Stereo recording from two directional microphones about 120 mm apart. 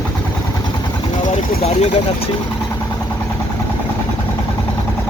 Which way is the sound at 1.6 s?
70° left (ahead or behind).